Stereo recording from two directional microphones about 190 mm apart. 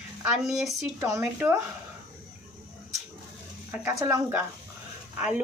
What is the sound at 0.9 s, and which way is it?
Speech, 15° right (ahead or behind).